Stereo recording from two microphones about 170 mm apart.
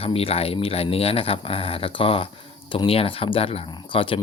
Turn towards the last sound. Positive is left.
turn(degrees=30)  # may be behind; listen again after turning